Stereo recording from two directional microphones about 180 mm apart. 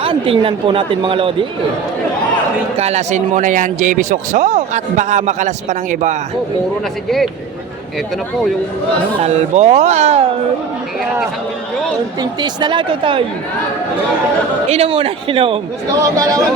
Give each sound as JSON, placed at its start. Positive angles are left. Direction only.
{"t": 0.0, "sound": "speech", "side_deg": -30}
{"t": 2.7, "sound": "speech", "side_deg": -35}
{"t": 9.2, "sound": "speech", "side_deg": -35}
{"t": 12.2, "sound": "speech", "side_deg": -25}
{"t": 14.7, "sound": "speech", "side_deg": -30}
{"t": 15.9, "sound": "speech", "side_deg": -20}